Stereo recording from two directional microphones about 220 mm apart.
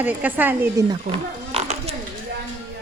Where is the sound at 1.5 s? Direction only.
30° right (ahead or behind).